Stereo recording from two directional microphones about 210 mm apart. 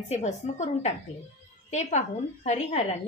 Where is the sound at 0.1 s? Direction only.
35° left (ahead or behind).